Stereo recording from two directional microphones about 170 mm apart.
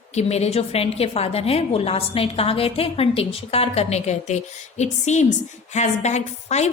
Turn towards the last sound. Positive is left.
turn(degrees=40)  # may be behind; listen again after turning